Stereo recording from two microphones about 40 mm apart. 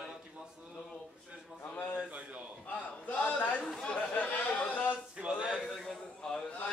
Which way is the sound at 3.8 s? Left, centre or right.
Left.